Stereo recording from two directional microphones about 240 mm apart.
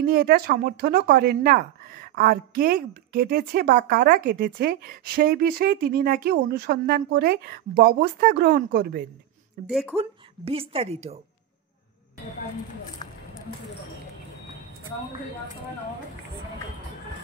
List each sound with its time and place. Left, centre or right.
0.0 s speech: right
9.7 s speech: centre
9.9 s speech: right
13.0 s a sound: centre